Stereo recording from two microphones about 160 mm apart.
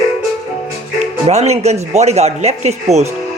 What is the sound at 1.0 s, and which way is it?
Speech, 45° right (ahead or behind).